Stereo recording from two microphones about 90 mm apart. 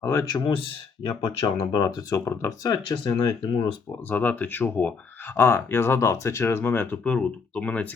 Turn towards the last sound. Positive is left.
turn(degrees=15)  # may be behind; listen again after turning